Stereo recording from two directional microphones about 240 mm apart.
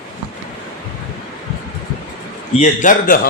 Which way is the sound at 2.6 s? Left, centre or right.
Left.